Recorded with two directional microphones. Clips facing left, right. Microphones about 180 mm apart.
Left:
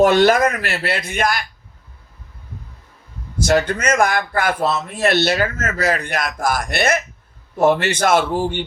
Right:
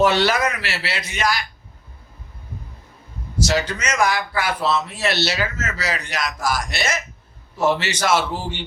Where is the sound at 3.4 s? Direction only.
55° left (ahead or behind).